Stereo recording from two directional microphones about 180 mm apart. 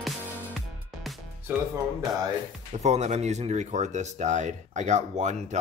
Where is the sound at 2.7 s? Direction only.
40° right (ahead or behind).